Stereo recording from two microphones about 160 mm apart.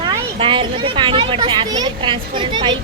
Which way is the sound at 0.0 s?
30° right (ahead or behind).